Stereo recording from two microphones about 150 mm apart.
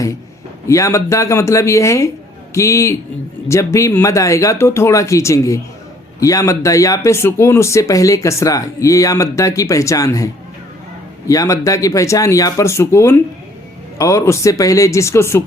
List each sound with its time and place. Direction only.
0.7 s speech: 20° left (ahead or behind)
11.3 s speech: 20° left (ahead or behind)